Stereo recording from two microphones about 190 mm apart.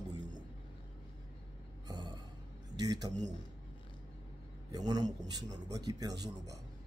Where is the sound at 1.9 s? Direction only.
20° right (ahead or behind).